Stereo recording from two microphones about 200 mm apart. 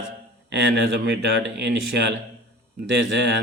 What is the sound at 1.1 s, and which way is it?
Speech, 55° right (ahead or behind).